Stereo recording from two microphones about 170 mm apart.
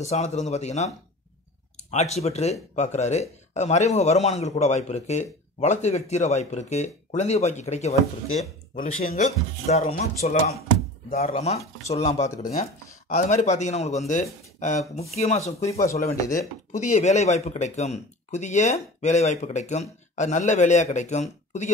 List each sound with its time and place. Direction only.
0.0 s speech: 40° left (ahead or behind)
9.7 s speech: 40° left (ahead or behind)